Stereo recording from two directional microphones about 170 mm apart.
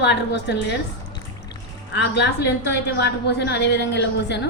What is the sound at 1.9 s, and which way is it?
A woman's voice, 90° left.